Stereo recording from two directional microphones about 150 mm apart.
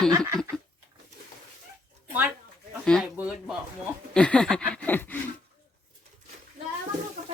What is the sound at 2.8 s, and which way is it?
Chicken, 5° left (ahead or behind).